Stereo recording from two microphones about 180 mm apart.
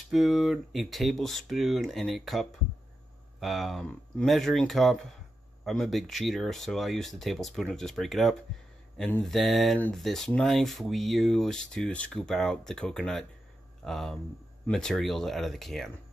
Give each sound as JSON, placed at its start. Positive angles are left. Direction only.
{"t": 0.1, "sound": "speech", "side_deg": 0}